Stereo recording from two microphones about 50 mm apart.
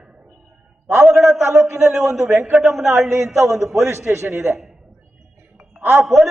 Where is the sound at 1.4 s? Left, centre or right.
Right.